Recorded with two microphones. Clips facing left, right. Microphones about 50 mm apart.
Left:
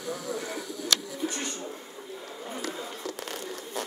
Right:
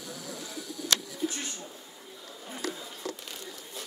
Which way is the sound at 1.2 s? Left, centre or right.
Left.